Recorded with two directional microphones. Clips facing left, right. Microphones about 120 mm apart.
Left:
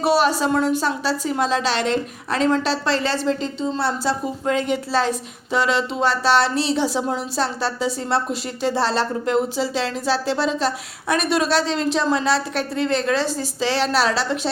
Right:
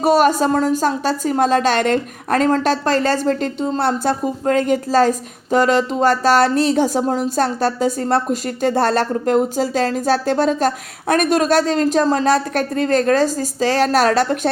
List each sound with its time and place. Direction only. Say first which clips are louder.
0.0 s a woman's voice: right 4 dB; 45° right (ahead or behind)